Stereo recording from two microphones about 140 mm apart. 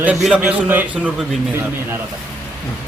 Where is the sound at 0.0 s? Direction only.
5° right (ahead or behind).